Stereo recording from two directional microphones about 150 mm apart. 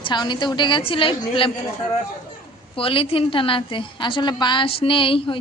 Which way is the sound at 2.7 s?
40° left (ahead or behind).